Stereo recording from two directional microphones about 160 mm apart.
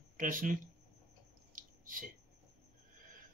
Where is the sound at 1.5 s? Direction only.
60° right (ahead or behind).